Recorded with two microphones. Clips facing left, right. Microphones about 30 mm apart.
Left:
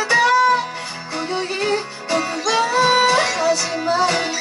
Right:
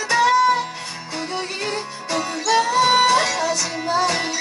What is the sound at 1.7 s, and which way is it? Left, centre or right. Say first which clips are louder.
Music: left 4 dB; centre.